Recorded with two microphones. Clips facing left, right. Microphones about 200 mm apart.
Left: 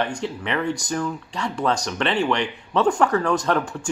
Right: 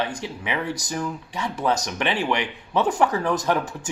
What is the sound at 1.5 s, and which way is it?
Speech, 15° right (ahead or behind).